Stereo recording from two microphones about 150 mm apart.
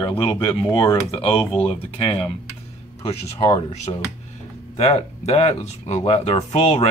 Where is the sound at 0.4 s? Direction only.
30° left (ahead or behind).